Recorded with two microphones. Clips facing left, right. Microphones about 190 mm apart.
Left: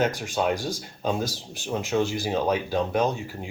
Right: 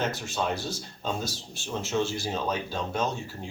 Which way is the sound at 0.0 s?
15° left (ahead or behind).